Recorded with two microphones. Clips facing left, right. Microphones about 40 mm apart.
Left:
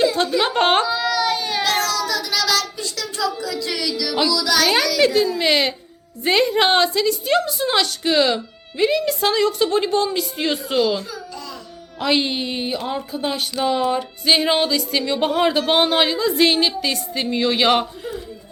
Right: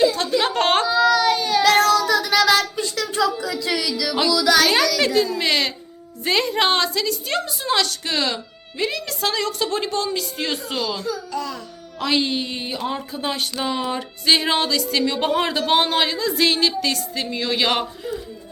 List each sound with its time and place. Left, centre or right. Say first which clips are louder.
0.0 s a sound: even; centre
0.9 s baby cry: right 3 dB; centre
1.8 s child singing: right 5 dB; right
3.8 s music: even; centre
4.3 s speech: right 3 dB; right
4.5 s speech: left 2 dB; centre
6.2 s a sound: left 3 dB; centre
7.3 s speech: left 4 dB; centre
8.8 s a sound: left 6 dB; centre
11.3 s music: right 7 dB; right
11.9 s speech: left 1 dB; centre
15.6 s a sound: left 1 dB; centre